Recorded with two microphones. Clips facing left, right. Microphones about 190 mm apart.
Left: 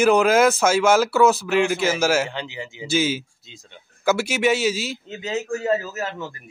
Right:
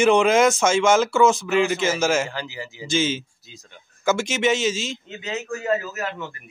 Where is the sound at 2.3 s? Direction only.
20° left (ahead or behind).